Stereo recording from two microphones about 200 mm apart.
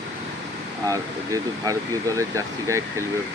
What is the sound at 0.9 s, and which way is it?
Speech, 15° right (ahead or behind).